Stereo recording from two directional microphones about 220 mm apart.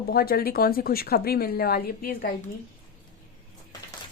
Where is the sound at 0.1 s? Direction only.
45° left (ahead or behind).